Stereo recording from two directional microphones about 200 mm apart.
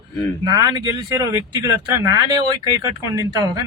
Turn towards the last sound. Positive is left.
turn(degrees=-20)  # may be behind; listen again after turning